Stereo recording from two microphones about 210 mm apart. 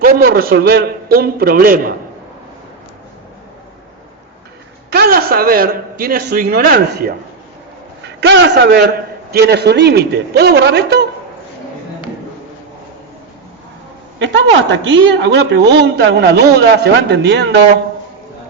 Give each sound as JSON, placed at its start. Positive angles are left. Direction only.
{"t": 0.0, "sound": "a man's voice", "side_deg": -45}
{"t": 4.9, "sound": "a man's voice", "side_deg": -45}
{"t": 14.2, "sound": "a man's voice", "side_deg": -60}